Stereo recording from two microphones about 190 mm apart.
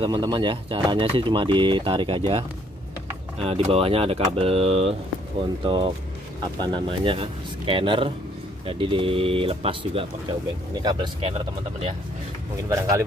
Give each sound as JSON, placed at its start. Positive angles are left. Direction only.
{"t": 0.0, "sound": "speech", "side_deg": -25}
{"t": 12.6, "sound": "speech", "side_deg": -15}